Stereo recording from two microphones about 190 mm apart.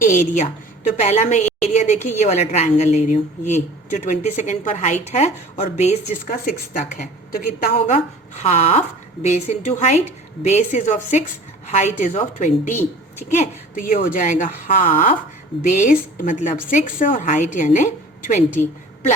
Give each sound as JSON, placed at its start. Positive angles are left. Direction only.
{"t": 0.0, "sound": "a woman's voice", "side_deg": 40}
{"t": 7.9, "sound": "a woman's voice", "side_deg": 35}